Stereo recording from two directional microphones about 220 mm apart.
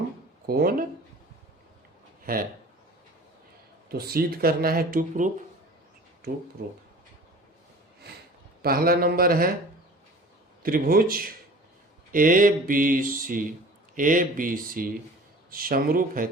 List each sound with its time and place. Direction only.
0.4 s speech: 45° right (ahead or behind)
2.2 s speech: 40° right (ahead or behind)
3.8 s speech: 45° right (ahead or behind)
8.6 s mantra: 40° right (ahead or behind)
10.6 s mantra: 40° right (ahead or behind)